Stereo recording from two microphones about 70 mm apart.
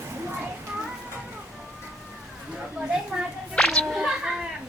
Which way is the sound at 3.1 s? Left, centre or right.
Centre.